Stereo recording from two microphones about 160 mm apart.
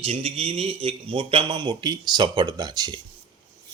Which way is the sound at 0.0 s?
35° right (ahead or behind).